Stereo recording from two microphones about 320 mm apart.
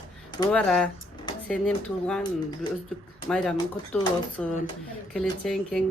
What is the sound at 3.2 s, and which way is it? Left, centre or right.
Speech, centre.